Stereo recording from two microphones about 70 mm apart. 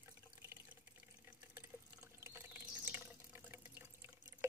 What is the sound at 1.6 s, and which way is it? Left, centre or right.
Water, right.